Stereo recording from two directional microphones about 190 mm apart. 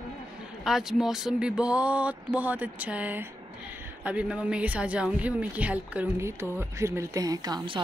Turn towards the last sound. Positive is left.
turn(degrees=-20)  # may be behind; listen again after turning